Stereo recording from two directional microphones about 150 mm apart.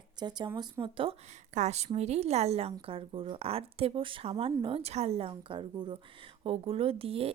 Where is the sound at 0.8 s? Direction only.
35° right (ahead or behind).